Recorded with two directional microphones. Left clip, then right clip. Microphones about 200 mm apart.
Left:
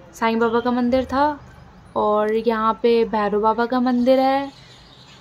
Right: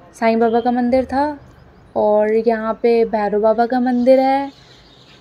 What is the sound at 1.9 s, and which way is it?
Speech, 20° left (ahead or behind).